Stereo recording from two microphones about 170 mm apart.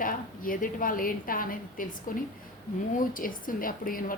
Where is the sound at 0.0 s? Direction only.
55° left (ahead or behind).